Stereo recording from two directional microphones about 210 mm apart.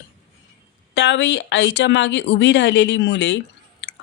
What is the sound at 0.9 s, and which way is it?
Speech, 55° left (ahead or behind).